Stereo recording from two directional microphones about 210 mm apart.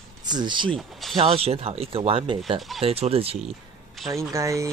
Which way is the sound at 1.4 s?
30° right (ahead or behind).